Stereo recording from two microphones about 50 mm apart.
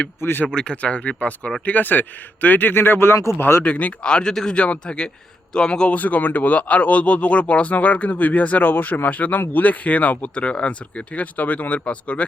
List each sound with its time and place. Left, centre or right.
0.2 s speech: left
0.4 s speech: centre
1.6 s a man's voice: left
3.6 s speech: left
4.1 s a man's voice: centre
6.0 s speech: left